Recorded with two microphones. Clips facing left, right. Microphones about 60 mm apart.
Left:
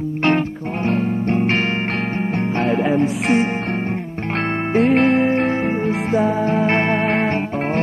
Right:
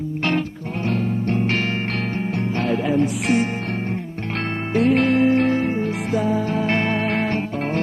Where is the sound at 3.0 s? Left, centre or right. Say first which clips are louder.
Left 2 dB; left.